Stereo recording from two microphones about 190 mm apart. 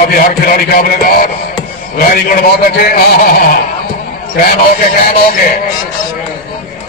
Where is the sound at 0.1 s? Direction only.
50° left (ahead or behind).